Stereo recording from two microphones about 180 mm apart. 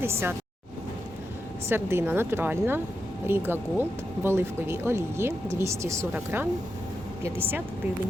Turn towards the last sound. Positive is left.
turn(degrees=-10)  # may be behind; listen again after turning